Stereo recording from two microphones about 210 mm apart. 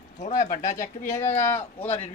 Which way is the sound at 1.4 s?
10° left (ahead or behind).